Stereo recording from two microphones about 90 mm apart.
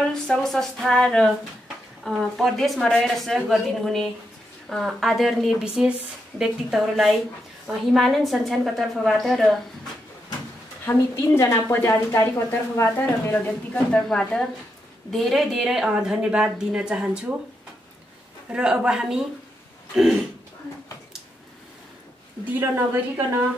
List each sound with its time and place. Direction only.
0.0 s a woman's voice: 5° left (ahead or behind)
10.9 s a woman's voice: 30° left (ahead or behind)
13.9 s a woman's voice: 10° left (ahead or behind); by 17.4 s 10° right (ahead or behind)
18.5 s a woman's voice: 10° right (ahead or behind)
22.5 s a woman's voice: 25° right (ahead or behind)